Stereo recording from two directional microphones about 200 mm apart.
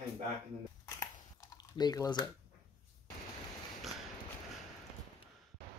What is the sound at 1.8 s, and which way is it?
Speech, 20° left (ahead or behind).